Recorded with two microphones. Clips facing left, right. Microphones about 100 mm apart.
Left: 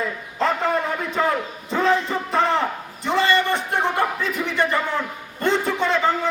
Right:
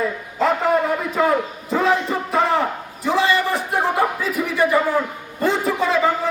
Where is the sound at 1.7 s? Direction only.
5° right (ahead or behind).